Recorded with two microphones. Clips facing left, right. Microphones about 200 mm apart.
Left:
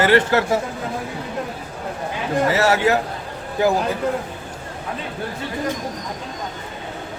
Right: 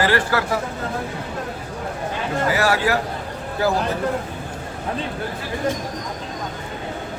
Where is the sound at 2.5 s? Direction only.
25° left (ahead or behind).